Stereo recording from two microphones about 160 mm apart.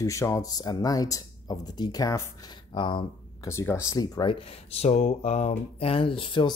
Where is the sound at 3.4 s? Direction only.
15° left (ahead or behind).